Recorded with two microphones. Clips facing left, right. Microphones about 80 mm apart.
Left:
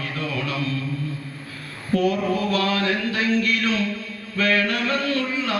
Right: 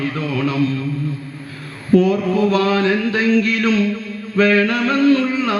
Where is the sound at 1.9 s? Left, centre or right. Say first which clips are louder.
Right 7 dB; right.